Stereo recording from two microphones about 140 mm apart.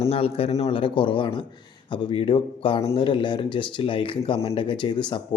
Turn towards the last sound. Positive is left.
turn(degrees=35)  # may be behind; listen again after turning